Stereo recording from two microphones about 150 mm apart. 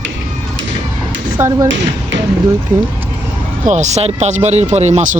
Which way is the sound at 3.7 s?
50° right (ahead or behind).